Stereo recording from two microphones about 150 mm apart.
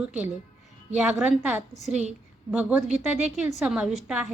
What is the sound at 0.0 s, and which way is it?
A woman's voice, 10° right (ahead or behind).